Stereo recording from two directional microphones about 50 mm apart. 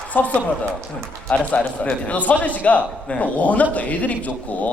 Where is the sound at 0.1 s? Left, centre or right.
Left.